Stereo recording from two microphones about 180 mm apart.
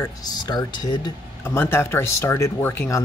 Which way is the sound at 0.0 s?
20° left (ahead or behind).